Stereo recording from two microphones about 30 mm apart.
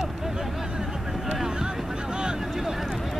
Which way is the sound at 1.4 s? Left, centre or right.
Right.